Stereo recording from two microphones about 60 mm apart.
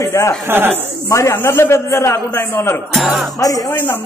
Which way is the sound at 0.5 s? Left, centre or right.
Right.